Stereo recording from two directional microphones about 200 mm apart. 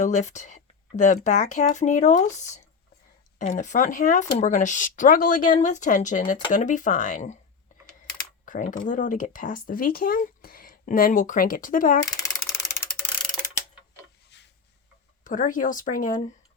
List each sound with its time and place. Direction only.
0.0 s speech: 35° left (ahead or behind)
3.3 s speech: 35° left (ahead or behind)
8.4 s speech: 40° left (ahead or behind)
12.3 s a sound: 5° right (ahead or behind)
14.3 s a sound: 60° left (ahead or behind)
15.2 s speech: 40° left (ahead or behind)